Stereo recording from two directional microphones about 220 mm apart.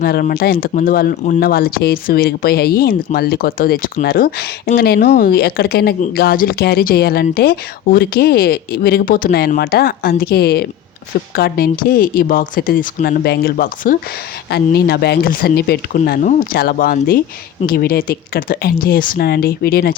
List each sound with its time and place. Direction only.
0.0 s speech: 45° left (ahead or behind)